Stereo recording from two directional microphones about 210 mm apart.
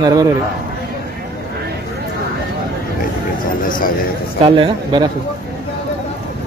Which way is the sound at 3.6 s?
40° left (ahead or behind).